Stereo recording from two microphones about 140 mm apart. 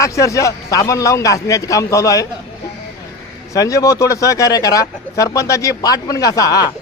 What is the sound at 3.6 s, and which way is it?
A man's voice, 25° left (ahead or behind).